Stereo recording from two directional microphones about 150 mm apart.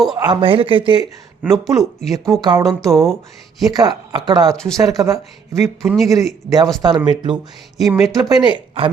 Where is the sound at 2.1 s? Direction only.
25° right (ahead or behind).